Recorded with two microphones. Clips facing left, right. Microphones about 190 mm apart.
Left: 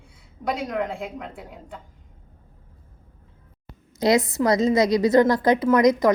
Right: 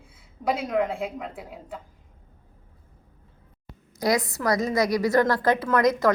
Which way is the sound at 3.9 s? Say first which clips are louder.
Left 5 dB; 25° left (ahead or behind).